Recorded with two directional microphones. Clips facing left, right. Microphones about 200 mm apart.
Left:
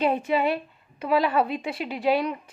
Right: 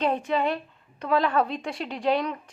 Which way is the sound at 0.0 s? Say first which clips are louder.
Left 2 dB; 5° left (ahead or behind).